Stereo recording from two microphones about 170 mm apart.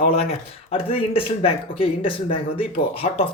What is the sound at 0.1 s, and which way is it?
Speech, 35° left (ahead or behind).